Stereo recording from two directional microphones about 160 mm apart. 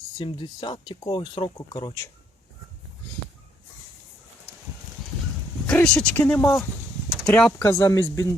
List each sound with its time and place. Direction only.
0.2 s speech: 30° left (ahead or behind)
5.6 s speech: 5° left (ahead or behind)